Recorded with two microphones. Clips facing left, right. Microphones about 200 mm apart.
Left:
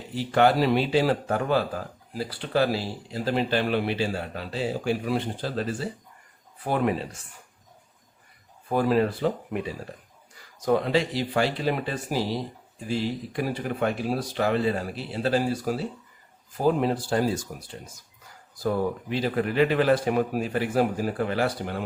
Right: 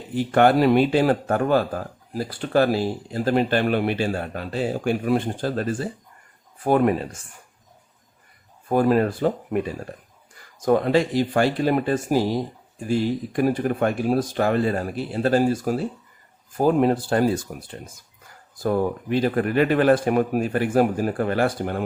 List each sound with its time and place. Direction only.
0.1 s speech: 50° right (ahead or behind)
8.7 s speech: 50° right (ahead or behind)